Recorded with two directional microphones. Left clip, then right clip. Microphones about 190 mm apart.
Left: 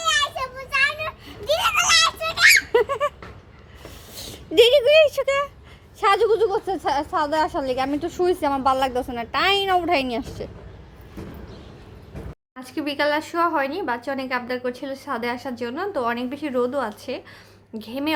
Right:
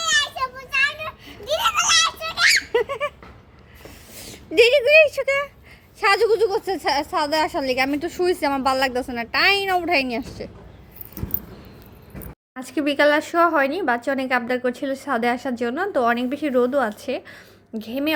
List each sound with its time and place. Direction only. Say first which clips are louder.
0.0 s children playing: right 1 dB; 5° left (ahead or behind)
1.5 s a sound: left 1 dB; 5° left (ahead or behind)
6.0 s a woman's voice: right 1 dB; 10° right (ahead or behind)
12.5 s a woman's voice: right 5 dB; 25° right (ahead or behind)